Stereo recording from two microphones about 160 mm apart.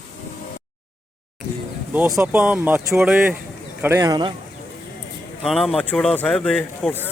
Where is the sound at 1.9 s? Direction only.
10° right (ahead or behind).